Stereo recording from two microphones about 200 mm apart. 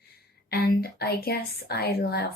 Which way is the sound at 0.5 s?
50° left (ahead or behind).